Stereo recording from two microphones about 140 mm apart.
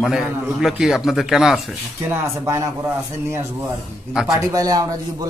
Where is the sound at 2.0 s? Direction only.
20° right (ahead or behind).